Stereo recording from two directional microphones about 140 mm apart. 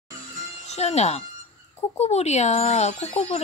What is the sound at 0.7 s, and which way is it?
Speech, 50° left (ahead or behind).